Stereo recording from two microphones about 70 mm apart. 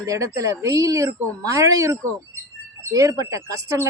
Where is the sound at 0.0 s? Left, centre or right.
Right.